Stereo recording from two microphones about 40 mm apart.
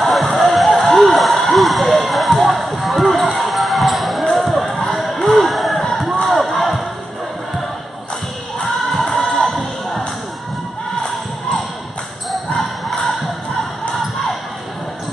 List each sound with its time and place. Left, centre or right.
0.0 s music: centre
4.7 s a sound: centre
5.3 s music: centre
5.9 s a sound: centre
8.6 s music: centre
12.3 s basketball bounce: centre